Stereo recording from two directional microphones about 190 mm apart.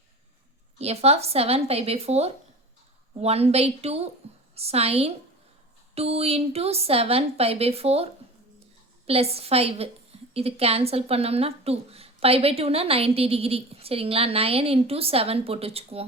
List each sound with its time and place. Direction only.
0.8 s speech: 35° right (ahead or behind)